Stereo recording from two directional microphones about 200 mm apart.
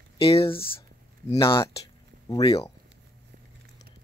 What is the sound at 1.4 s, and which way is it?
Speech, 15° left (ahead or behind).